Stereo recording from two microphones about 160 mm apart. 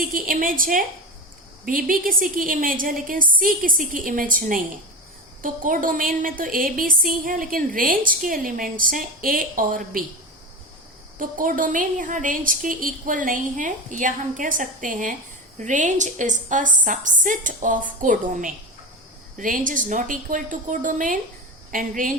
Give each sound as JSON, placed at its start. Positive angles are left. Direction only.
{"t": 0.0, "sound": "a woman's voice", "side_deg": -60}
{"t": 11.2, "sound": "a woman's voice", "side_deg": -60}